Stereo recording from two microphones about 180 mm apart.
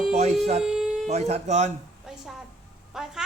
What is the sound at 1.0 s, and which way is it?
Speech, 35° right (ahead or behind).